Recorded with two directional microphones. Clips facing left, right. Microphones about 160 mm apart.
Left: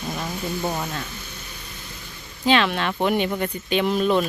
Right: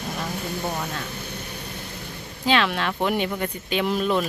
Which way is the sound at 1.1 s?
60° right (ahead or behind).